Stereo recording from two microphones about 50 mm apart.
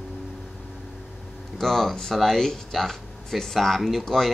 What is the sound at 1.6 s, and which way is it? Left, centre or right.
Speech, centre.